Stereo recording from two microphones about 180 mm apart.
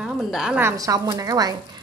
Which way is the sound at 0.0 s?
Centre (ahead or behind).